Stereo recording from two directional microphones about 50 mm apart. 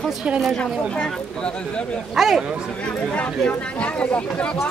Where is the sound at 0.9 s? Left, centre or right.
Centre.